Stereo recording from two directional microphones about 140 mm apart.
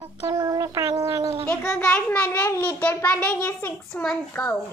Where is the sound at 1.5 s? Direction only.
5° left (ahead or behind).